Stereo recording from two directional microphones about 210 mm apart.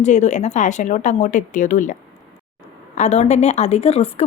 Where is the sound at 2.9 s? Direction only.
35° left (ahead or behind).